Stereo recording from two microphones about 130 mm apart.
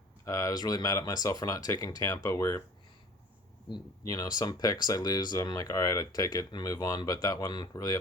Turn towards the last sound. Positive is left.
turn(degrees=30)  # may be behind; listen again after turning